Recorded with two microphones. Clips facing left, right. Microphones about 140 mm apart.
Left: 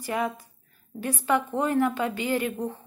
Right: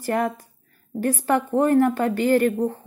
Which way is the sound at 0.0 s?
50° right (ahead or behind).